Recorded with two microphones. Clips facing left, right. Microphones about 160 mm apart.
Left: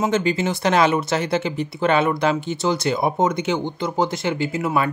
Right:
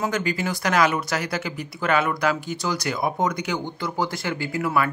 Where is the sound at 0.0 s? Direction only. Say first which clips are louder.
Left 5 dB; 25° left (ahead or behind).